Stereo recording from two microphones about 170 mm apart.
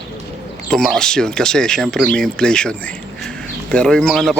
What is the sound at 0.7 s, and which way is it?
Speech, 5° left (ahead or behind).